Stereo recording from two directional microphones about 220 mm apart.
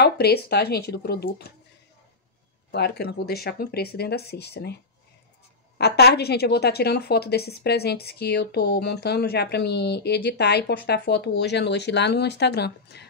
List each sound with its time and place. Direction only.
0.0 s a woman's voice: 45° left (ahead or behind)
2.7 s a woman's voice: 50° left (ahead or behind)
5.8 s a woman's voice: 50° left (ahead or behind)